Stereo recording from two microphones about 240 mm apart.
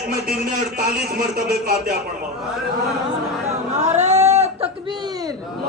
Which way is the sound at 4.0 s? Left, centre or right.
Right.